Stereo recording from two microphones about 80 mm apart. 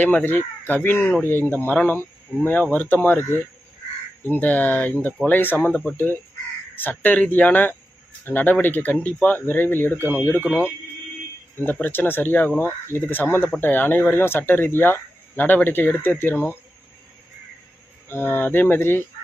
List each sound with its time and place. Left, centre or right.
0.0 s speech: left
11.5 s speech: left
18.1 s speech: left